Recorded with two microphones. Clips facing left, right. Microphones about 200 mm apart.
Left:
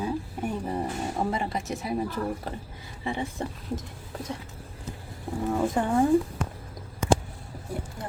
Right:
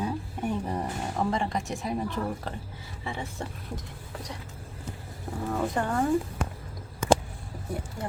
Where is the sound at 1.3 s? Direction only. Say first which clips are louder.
Even; 5° left (ahead or behind).